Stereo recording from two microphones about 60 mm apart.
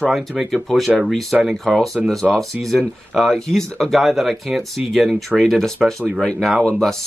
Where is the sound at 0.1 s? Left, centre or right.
Centre.